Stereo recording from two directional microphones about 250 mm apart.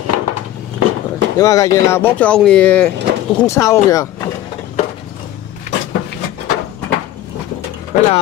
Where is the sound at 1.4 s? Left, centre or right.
Centre.